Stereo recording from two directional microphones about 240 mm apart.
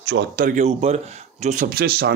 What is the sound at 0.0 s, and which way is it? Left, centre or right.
Speech, right.